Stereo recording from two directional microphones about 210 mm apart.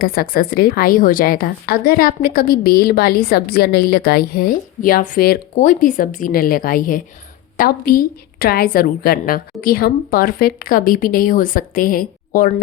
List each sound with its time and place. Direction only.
0.0 s a woman's voice: 45° left (ahead or behind)